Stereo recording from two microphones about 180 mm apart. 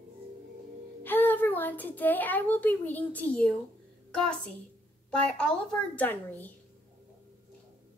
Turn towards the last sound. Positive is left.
turn(degrees=10)  # may be behind; listen again after turning